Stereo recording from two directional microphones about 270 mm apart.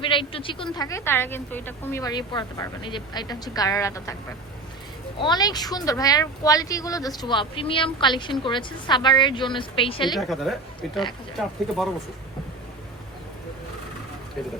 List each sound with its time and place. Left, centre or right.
0.0 s speech: centre
5.2 s speech: centre
10.2 s speech: centre